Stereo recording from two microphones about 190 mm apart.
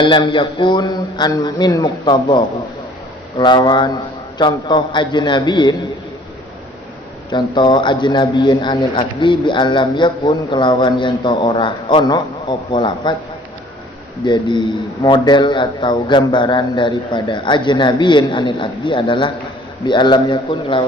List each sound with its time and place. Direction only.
0.0 s speech: 25° left (ahead or behind)
7.3 s speech: 25° left (ahead or behind)
14.3 s speech: 25° left (ahead or behind)